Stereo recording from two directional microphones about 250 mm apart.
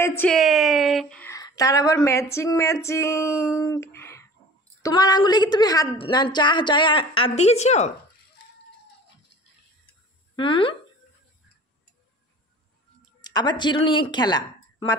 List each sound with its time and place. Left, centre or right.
0.0 s a woman's voice: centre; by 7.9 s left
9.8 s a sound: centre
13.2 s speech: centre